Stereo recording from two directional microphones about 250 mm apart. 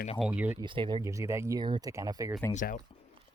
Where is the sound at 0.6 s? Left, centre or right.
Centre.